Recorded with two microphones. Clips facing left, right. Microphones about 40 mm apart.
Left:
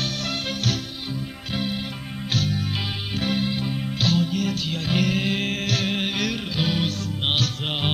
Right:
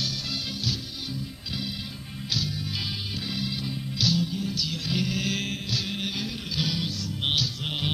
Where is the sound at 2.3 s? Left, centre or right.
Left.